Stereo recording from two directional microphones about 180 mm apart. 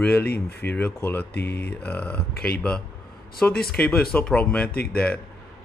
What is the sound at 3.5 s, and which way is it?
Speech, 60° left (ahead or behind).